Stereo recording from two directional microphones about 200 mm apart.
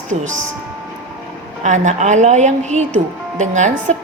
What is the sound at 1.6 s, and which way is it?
A woman's voice, 35° right (ahead or behind).